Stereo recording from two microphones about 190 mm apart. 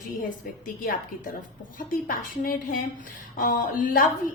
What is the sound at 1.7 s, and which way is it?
A woman's voice, 50° left (ahead or behind).